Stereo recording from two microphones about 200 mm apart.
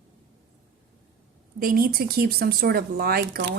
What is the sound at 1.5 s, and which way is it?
Speech, 45° right (ahead or behind).